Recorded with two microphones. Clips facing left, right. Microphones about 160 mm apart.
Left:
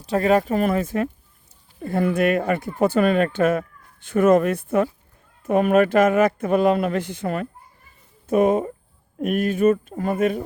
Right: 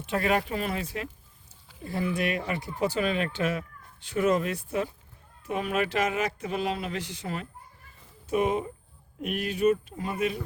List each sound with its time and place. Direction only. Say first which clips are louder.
0.0 s speech: left 8 dB; 35° left (ahead or behind)